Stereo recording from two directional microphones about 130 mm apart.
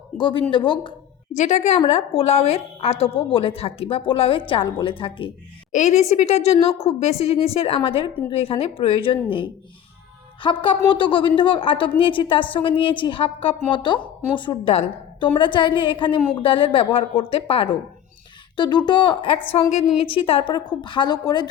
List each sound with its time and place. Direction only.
0.2 s a woman's voice: 40° left (ahead or behind)
1.3 s a woman's voice: 65° left (ahead or behind)
1.8 s a woman's voice: 50° left (ahead or behind)
5.7 s a woman's voice: 60° left (ahead or behind)
10.4 s a woman's voice: 40° left (ahead or behind)